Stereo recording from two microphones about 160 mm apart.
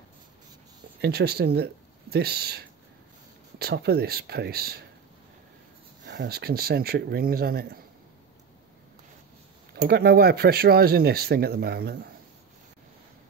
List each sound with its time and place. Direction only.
1.0 s speech: 90° right
6.0 s speech: 80° right
9.8 s speech: 85° right